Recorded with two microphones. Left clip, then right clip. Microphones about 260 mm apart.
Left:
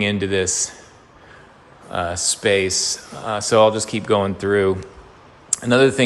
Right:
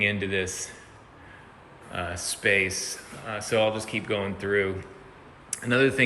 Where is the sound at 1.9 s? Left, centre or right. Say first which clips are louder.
Left 10 dB; centre.